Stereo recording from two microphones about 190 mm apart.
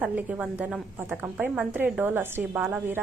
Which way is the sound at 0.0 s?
10° right (ahead or behind).